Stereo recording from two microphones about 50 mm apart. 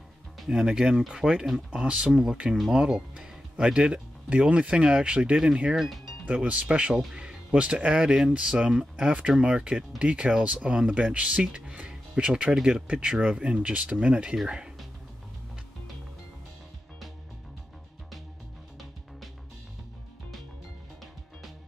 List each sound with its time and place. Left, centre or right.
0.5 s speech: centre
1.7 s speech: right
2.5 s speech: centre
2.8 s speech: centre
6.2 s speech: right